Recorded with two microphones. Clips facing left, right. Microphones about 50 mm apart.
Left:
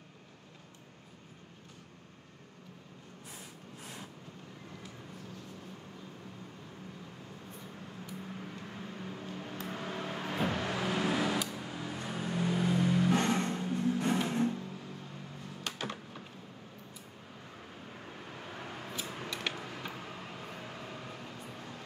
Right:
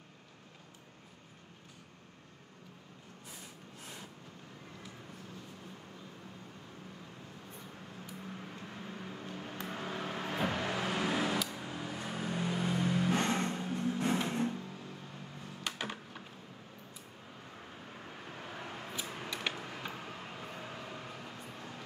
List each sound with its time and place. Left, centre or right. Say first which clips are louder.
8.2 s a sound: even; centre
9.7 s vehicle: even; centre
11.5 s a sound: left 1 dB; centre
12.4 s vehicle: left 5 dB; centre
13.3 s music: left 2 dB; centre
14.5 s vehicle: left 2 dB; centre
15.6 s music: even; centre
17.6 s vehicle: left 1 dB; centre
19.0 s a sound: even; centre
19.6 s vehicle: left 1 dB; centre